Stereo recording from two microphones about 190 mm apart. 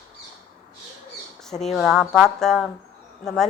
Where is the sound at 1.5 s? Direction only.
Centre (ahead or behind).